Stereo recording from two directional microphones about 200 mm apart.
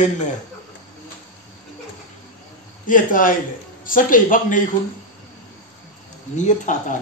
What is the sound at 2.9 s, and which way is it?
A man's voice, 40° left (ahead or behind).